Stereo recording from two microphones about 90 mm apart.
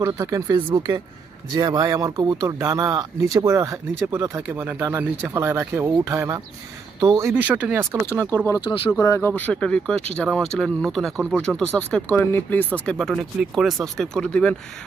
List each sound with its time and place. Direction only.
0.0 s speech: 40° right (ahead or behind)
0.7 s speech: 55° right (ahead or behind); by 7.3 s 35° right (ahead or behind)
7.4 s speech: 15° right (ahead or behind)
8.1 s speech: 20° left (ahead or behind)
8.9 s speech: 30° left (ahead or behind); by 12.2 s 10° left (ahead or behind)
12.2 s speech: 25° left (ahead or behind)
13.0 s speech: centre (ahead or behind)